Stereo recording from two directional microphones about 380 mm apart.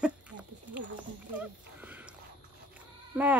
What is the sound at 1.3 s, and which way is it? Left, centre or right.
Horse, centre.